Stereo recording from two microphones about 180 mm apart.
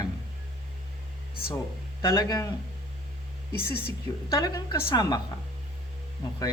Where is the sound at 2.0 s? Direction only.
20° left (ahead or behind).